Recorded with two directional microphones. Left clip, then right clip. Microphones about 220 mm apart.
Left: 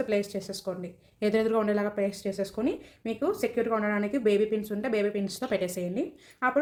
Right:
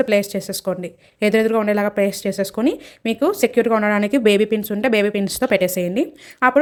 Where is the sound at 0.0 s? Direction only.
40° right (ahead or behind).